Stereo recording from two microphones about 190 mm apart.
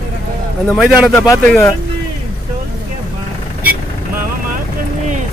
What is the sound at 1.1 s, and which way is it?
Speech, 15° left (ahead or behind).